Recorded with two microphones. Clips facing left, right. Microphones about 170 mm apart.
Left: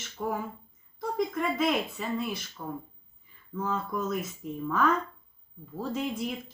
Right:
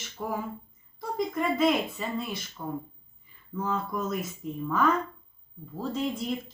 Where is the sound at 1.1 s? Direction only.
Centre (ahead or behind).